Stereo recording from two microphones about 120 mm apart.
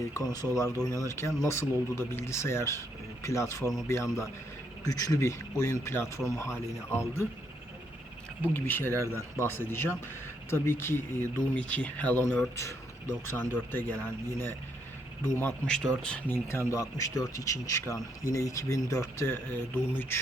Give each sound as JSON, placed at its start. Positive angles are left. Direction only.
{"t": 0.1, "sound": "speech", "side_deg": 30}
{"t": 8.4, "sound": "speech", "side_deg": 15}
{"t": 15.2, "sound": "speech", "side_deg": 15}